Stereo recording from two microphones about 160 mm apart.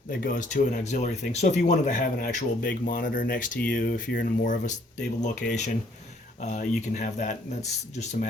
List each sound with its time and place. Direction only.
0.1 s speech: 60° left (ahead or behind)